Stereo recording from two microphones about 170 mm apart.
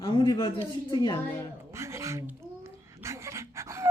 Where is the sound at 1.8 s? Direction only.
15° right (ahead or behind).